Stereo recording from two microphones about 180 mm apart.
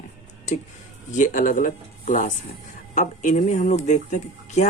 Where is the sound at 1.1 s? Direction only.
45° left (ahead or behind).